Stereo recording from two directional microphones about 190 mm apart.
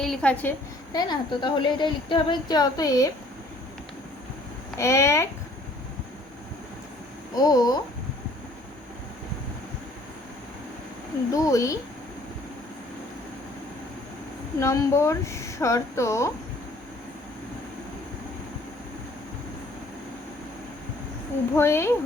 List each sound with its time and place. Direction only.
0.0 s a woman's voice: 5° left (ahead or behind)
0.9 s a woman's voice: 20° left (ahead or behind)
4.8 s speech: 15° left (ahead or behind)
7.3 s a woman's voice: 20° left (ahead or behind)
11.3 s speech: 15° left (ahead or behind)
14.6 s speech: 15° left (ahead or behind)
21.5 s speech: 15° left (ahead or behind)